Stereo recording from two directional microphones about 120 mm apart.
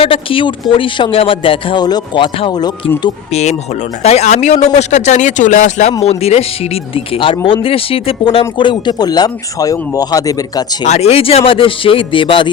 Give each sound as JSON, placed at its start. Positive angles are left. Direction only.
{"t": 0.0, "sound": "a man's voice", "side_deg": 50}
{"t": 4.0, "sound": "a man's voice", "side_deg": 65}
{"t": 6.0, "sound": "speech", "side_deg": 60}
{"t": 6.9, "sound": "speech", "side_deg": 50}
{"t": 10.8, "sound": "a man's voice", "side_deg": 65}